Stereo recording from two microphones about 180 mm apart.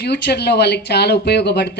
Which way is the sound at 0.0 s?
65° left (ahead or behind).